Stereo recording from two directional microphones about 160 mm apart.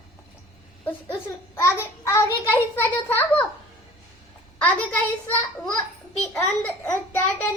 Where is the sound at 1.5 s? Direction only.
15° left (ahead or behind).